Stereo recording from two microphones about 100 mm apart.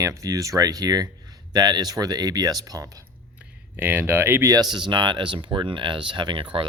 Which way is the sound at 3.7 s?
20° right (ahead or behind).